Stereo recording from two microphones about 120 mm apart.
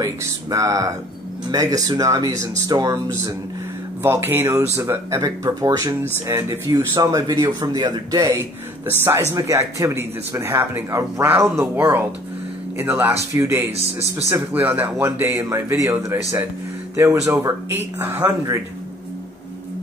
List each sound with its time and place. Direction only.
0.0 s speech: 30° right (ahead or behind)